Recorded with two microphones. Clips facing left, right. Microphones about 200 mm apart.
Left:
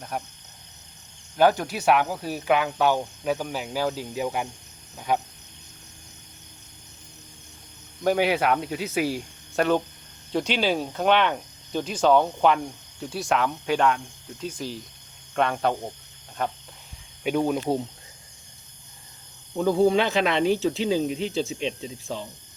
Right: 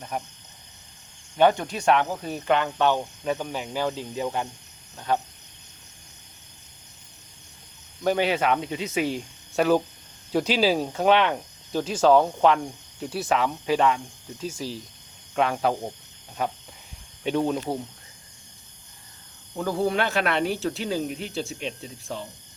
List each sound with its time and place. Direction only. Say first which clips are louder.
0.1 s speech: even; 5° left (ahead or behind)
1.4 s speech: even; 5° left (ahead or behind)
8.0 s speech: left 1 dB; 10° left (ahead or behind); by 16.5 s 5° right (ahead or behind)
17.2 s speech: left 1 dB; 10° left (ahead or behind)
19.5 s speech: left 5 dB; 20° left (ahead or behind)
20.3 s speech: left 3 dB; 10° right (ahead or behind)
20.6 s speech: left 4 dB; 15° left (ahead or behind)